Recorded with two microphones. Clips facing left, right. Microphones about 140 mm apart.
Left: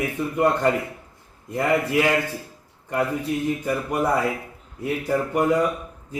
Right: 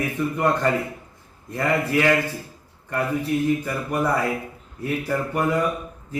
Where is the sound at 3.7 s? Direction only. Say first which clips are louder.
Left 1 dB; 20° left (ahead or behind).